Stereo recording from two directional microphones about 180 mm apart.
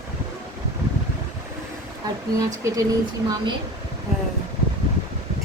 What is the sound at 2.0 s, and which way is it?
A woman's voice, 20° right (ahead or behind).